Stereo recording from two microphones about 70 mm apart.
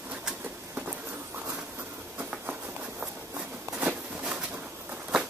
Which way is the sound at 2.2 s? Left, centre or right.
Right.